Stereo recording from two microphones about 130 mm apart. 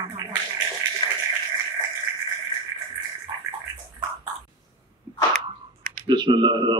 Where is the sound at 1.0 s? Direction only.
45° left (ahead or behind).